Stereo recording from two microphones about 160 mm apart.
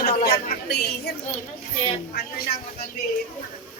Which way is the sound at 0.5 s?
90° left.